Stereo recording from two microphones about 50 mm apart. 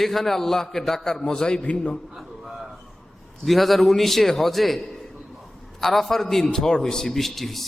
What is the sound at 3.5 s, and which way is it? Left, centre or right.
A man's voice, centre.